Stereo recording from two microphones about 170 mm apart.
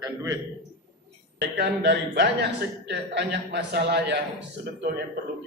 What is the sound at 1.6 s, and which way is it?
Speech, 75° right (ahead or behind).